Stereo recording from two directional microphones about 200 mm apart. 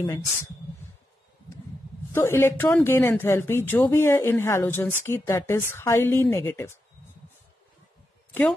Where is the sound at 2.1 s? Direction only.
10° left (ahead or behind).